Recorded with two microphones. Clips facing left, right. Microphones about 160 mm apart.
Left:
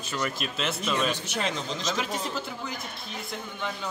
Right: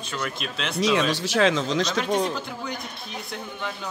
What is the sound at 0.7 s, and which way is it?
Speech, 90° right.